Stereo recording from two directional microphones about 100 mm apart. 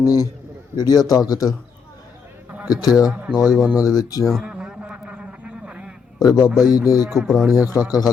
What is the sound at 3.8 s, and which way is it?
Speech, 40° left (ahead or behind).